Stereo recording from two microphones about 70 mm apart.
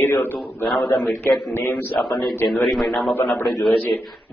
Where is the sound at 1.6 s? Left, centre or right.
Centre.